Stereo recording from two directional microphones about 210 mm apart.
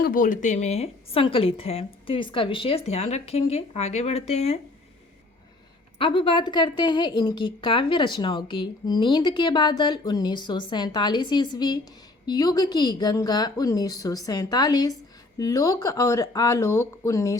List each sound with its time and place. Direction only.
0.0 s a woman's voice: 40° left (ahead or behind)
6.0 s a woman's voice: 25° left (ahead or behind)